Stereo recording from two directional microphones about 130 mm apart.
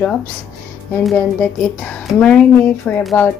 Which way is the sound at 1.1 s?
10° left (ahead or behind).